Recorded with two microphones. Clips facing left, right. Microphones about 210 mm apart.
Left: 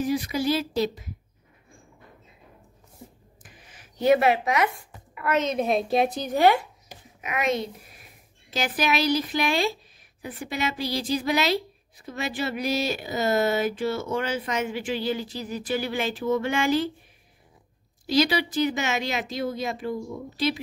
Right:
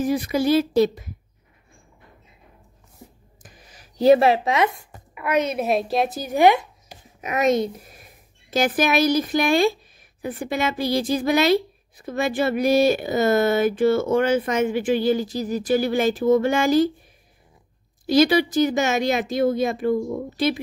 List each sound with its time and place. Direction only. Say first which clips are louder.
0.0 s a woman's voice: right 4 dB; 55° right (ahead or behind)
3.4 s speech: right 3 dB; 40° right (ahead or behind); by 6.4 s 5° right (ahead or behind)
7.2 s a woman's voice: right 6 dB; 40° right (ahead or behind)
18.0 s a woman's voice: right 6 dB; 50° right (ahead or behind)